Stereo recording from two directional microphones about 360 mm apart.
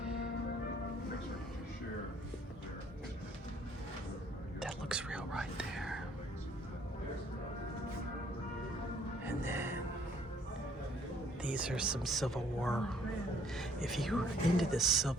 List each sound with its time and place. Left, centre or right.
4.6 s whispering: centre
9.2 s music: centre
11.4 s speech: centre